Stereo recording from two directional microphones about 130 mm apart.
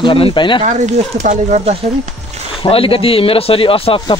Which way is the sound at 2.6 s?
45° left (ahead or behind).